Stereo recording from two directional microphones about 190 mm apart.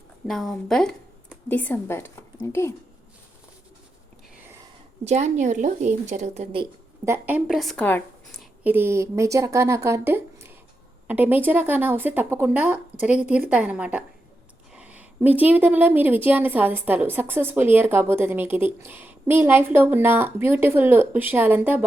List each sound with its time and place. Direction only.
0.3 s a woman's voice: centre (ahead or behind)
5.0 s a woman's voice: 35° right (ahead or behind)
7.0 s a woman's voice: 10° right (ahead or behind); by 8.4 s 10° left (ahead or behind)
8.6 s a woman's voice: 10° right (ahead or behind)